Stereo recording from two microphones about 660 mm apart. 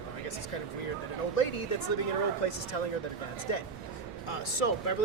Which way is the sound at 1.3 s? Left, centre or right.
Left.